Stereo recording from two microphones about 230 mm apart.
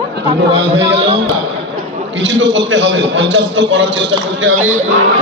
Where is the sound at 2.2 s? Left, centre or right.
Right.